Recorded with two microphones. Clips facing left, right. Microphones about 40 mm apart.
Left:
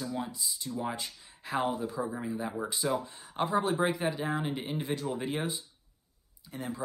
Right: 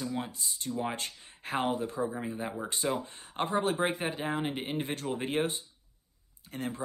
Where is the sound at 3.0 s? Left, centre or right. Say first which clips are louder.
Left 1 dB; right.